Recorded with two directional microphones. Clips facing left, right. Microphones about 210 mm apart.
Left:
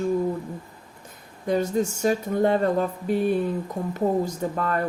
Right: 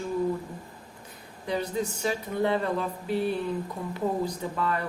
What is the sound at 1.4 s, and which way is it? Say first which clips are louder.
Speech: left 6 dB; 45° left (ahead or behind).